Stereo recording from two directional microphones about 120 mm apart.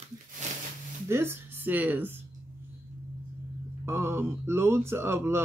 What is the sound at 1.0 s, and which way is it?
Speech, 20° right (ahead or behind).